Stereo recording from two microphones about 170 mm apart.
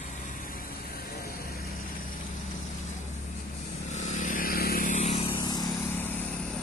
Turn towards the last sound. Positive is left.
turn(degrees=25)  # may be behind; listen again after turning